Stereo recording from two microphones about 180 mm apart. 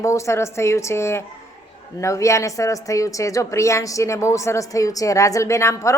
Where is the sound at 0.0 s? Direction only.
15° left (ahead or behind).